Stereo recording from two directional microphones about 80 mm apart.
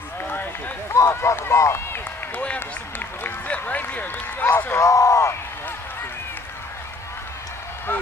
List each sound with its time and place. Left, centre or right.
0.9 s run: left
2.4 s speech: centre
4.7 s a sound: left